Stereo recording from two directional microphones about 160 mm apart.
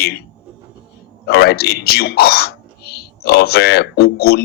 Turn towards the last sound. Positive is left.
turn(degrees=80)